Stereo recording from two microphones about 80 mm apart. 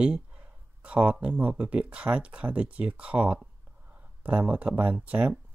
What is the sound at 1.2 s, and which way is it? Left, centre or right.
Speech, centre.